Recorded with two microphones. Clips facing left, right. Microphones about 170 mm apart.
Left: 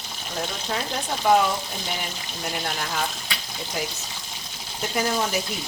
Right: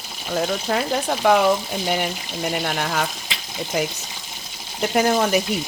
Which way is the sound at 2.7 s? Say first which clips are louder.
Right 5 dB; 65° right (ahead or behind).